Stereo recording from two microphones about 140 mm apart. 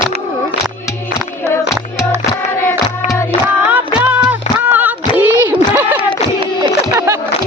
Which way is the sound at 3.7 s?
10° right (ahead or behind).